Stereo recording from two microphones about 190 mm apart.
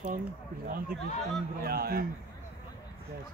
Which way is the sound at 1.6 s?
55° right (ahead or behind).